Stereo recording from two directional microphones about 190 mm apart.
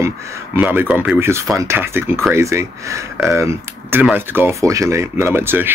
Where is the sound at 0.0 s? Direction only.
15° right (ahead or behind).